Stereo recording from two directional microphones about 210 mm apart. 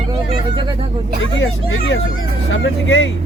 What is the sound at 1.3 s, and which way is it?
Speech, 65° left (ahead or behind).